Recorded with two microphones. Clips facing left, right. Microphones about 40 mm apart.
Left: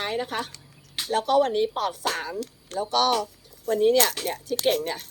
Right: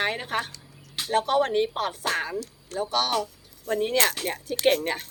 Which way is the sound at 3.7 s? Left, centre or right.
Right.